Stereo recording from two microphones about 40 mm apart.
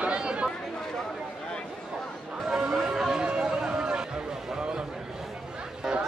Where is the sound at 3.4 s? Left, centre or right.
Centre.